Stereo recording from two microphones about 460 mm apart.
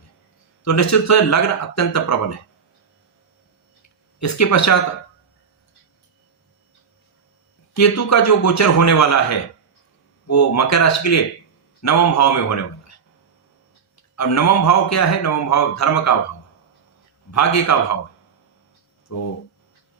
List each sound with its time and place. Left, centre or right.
0.6 s a man's voice: left
4.2 s a man's voice: left
7.7 s a man's voice: left
13.9 s a man's voice: left
17.3 s a man's voice: left
19.1 s a man's voice: left